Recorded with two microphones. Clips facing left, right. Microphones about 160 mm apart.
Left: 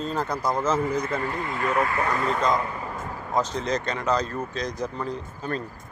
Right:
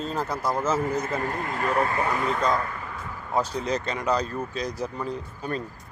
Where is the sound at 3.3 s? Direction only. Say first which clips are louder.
Even; 10° right (ahead or behind).